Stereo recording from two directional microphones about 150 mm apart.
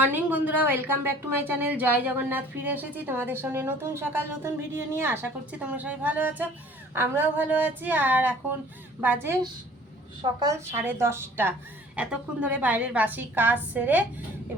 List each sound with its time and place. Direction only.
0.0 s a woman's voice: 10° right (ahead or behind)
10.4 s a woman's voice: 20° right (ahead or behind)